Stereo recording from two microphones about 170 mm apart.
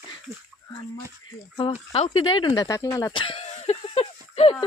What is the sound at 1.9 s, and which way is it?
Speech, 35° left (ahead or behind).